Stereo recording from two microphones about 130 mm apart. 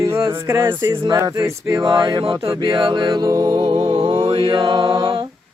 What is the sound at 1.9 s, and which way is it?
Speech, 35° right (ahead or behind).